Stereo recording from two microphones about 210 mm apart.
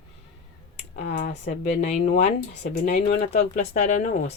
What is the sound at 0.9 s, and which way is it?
Speech, 50° left (ahead or behind).